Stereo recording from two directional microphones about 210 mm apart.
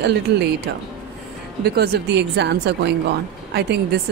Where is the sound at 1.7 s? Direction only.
50° right (ahead or behind).